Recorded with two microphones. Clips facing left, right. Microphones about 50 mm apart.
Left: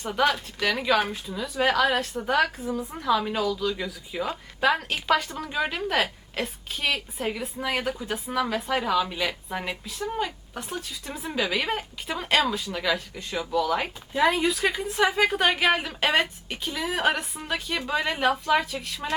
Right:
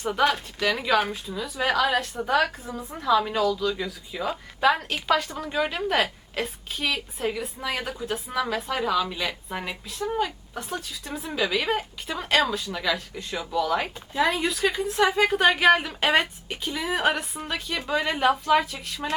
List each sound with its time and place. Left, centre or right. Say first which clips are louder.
0.0 s a woman's voice: right 1 dB; centre